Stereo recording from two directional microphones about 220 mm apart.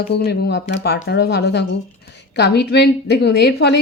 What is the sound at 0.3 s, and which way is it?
A woman's voice, 50° left (ahead or behind).